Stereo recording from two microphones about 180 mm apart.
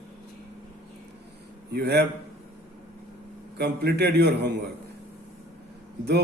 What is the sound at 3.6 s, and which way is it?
Speech, 65° right (ahead or behind).